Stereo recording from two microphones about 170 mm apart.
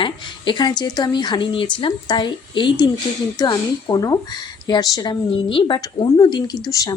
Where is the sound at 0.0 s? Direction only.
30° left (ahead or behind).